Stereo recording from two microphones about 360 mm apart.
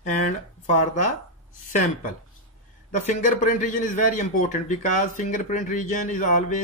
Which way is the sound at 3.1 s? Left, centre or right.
Left.